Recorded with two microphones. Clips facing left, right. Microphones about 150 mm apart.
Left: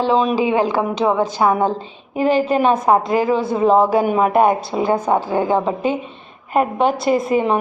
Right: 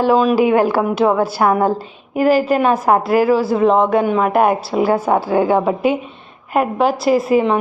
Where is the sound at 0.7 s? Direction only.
15° left (ahead or behind).